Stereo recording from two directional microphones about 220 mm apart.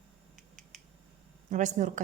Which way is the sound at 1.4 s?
35° right (ahead or behind).